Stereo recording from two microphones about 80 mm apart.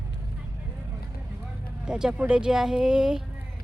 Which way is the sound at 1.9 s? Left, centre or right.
Centre.